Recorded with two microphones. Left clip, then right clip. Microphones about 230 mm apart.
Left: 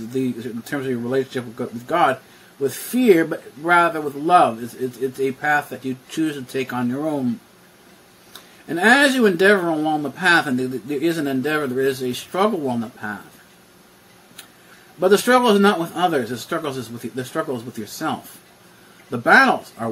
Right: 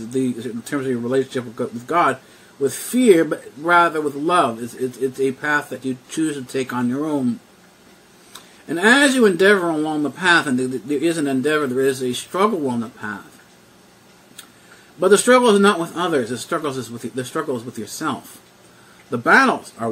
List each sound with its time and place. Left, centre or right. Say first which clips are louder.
0.1 s speech: right 2 dB; centre
8.3 s speech: right 1 dB; centre
15.0 s speech: right 2 dB; centre